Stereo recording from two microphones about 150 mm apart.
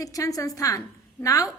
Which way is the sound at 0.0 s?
25° left (ahead or behind).